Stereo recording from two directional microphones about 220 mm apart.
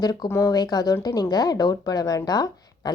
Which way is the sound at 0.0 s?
15° left (ahead or behind).